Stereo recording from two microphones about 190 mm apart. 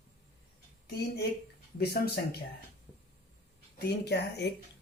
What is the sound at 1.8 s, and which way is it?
Speech, 60° left (ahead or behind).